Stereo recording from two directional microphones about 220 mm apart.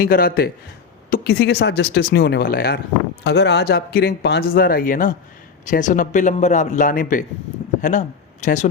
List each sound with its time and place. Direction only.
0.0 s a man's voice: 40° left (ahead or behind)